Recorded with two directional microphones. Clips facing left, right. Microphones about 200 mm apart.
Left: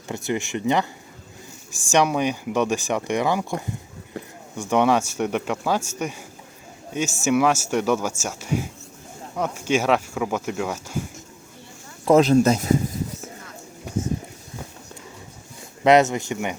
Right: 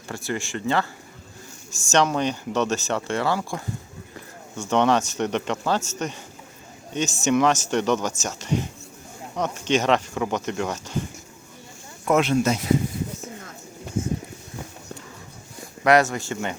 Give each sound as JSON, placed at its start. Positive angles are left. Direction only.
{"t": 0.1, "sound": "speech", "side_deg": 20}
{"t": 1.9, "sound": "speech", "side_deg": 10}
{"t": 4.7, "sound": "speech", "side_deg": 10}
{"t": 12.0, "sound": "speech", "side_deg": 35}
{"t": 15.8, "sound": "speech", "side_deg": 20}